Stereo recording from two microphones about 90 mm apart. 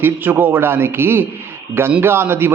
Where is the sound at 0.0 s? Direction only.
20° right (ahead or behind).